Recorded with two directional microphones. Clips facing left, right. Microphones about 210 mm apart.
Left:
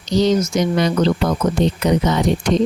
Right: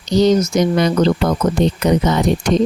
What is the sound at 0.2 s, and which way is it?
A woman's voice, 40° right (ahead or behind).